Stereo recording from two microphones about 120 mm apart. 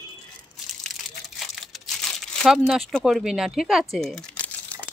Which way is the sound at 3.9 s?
10° left (ahead or behind).